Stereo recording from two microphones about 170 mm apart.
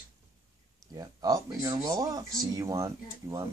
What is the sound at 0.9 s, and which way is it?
Speech, 20° right (ahead or behind).